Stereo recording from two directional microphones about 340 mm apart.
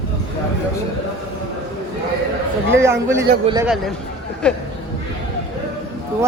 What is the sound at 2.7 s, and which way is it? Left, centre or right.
A man's voice, centre.